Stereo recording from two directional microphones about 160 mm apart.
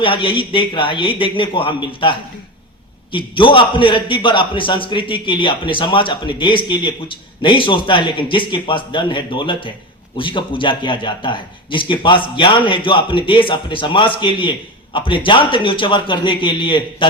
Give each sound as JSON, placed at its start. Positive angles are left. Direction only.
{"t": 0.0, "sound": "a man's voice", "side_deg": 35}